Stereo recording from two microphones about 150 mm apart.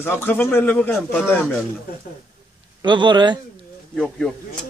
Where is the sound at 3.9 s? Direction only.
5° left (ahead or behind).